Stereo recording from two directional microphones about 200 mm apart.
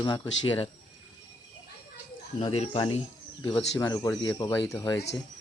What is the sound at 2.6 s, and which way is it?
Speech, 25° left (ahead or behind).